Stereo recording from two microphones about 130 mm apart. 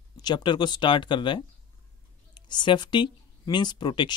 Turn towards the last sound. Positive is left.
turn(degrees=35)  # may be behind; listen again after turning